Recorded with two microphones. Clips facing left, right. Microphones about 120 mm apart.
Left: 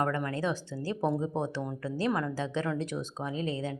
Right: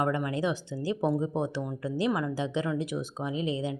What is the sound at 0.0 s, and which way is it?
Speech, 15° right (ahead or behind).